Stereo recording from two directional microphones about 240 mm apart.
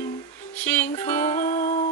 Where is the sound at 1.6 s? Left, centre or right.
Left.